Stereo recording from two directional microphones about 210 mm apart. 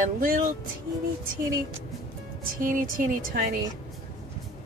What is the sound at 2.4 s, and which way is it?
Speech, 40° right (ahead or behind).